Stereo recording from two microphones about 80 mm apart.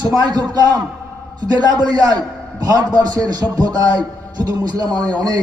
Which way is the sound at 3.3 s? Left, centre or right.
Right.